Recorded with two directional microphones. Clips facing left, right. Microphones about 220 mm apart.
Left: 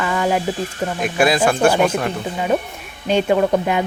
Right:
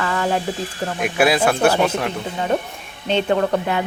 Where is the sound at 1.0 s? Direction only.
10° right (ahead or behind).